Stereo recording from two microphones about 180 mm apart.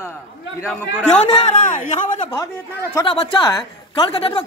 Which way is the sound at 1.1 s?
40° left (ahead or behind).